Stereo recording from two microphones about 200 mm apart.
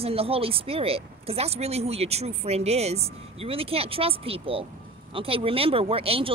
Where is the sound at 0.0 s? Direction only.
30° right (ahead or behind).